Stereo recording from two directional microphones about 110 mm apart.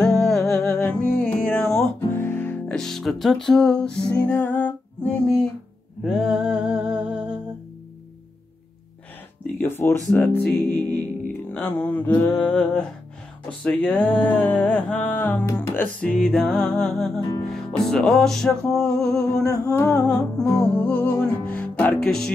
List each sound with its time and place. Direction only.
0.0 s music: 5° left (ahead or behind)
2.1 s music: 20° left (ahead or behind)
2.7 s music: 5° left (ahead or behind)
6.0 s music: 5° right (ahead or behind)
9.7 s speech: 20° left (ahead or behind)
10.2 s music: 10° left (ahead or behind)
16.0 s music: 10° left (ahead or behind)
19.4 s humming: 30° left (ahead or behind)
20.3 s music: 10° left (ahead or behind)